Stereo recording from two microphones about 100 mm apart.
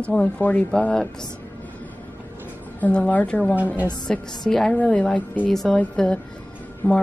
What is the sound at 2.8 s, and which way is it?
Speech, 15° left (ahead or behind).